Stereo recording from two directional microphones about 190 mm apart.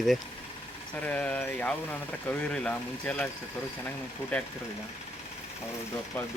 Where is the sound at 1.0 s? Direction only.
5° left (ahead or behind).